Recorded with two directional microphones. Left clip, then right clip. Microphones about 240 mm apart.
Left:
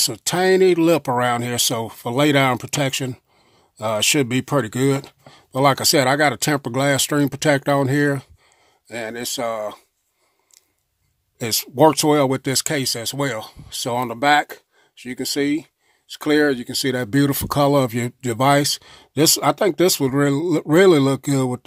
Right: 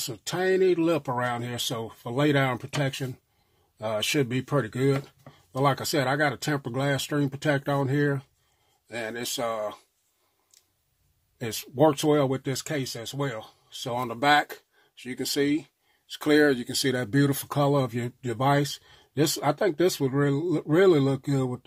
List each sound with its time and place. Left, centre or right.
0.0 s speech: left
11.3 s speech: left